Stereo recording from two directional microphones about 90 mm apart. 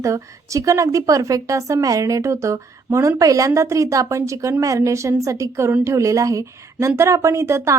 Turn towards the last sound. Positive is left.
turn(degrees=-30)  # may be behind; listen again after turning